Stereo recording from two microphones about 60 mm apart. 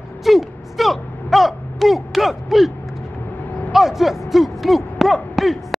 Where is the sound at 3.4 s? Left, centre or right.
Left.